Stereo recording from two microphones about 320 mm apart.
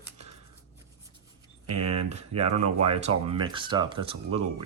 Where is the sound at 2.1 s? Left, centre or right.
Centre.